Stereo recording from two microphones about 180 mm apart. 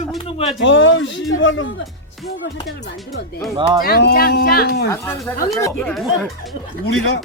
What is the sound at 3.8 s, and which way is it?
Speech, 60° left (ahead or behind).